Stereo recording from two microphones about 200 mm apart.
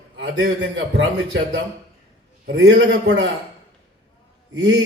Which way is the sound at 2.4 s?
60° right (ahead or behind).